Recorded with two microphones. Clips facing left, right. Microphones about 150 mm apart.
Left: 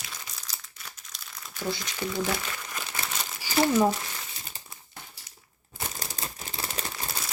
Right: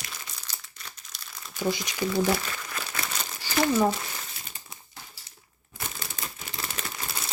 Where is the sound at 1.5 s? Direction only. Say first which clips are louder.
Right 4 dB; 15° right (ahead or behind).